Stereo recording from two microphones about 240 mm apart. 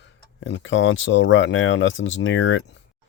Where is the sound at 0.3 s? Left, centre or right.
Left.